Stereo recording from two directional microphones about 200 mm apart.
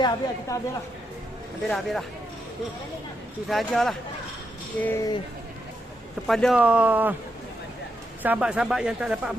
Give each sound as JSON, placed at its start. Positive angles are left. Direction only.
{"t": 0.0, "sound": "a woman's voice", "side_deg": 15}
{"t": 1.7, "sound": "speech", "side_deg": 0}
{"t": 3.5, "sound": "a woman's voice", "side_deg": 0}
{"t": 6.2, "sound": "speech", "side_deg": 0}
{"t": 8.2, "sound": "speech", "side_deg": -5}